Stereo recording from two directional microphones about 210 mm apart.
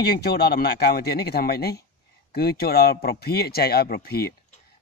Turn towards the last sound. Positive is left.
turn(degrees=50)  # may be behind; listen again after turning